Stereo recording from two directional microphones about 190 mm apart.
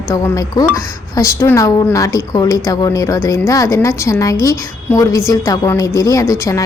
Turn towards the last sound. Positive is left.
turn(degrees=15)  # may be behind; listen again after turning